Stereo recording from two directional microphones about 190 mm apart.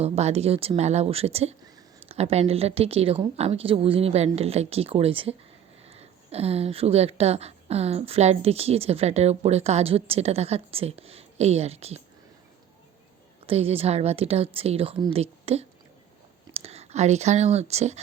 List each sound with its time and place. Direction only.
0.0 s a woman's voice: 35° right (ahead or behind)
13.5 s a woman's voice: 30° right (ahead or behind)